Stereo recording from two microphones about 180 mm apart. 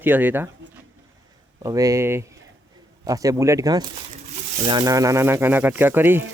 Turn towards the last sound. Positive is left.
turn(degrees=-10)  # may be behind; listen again after turning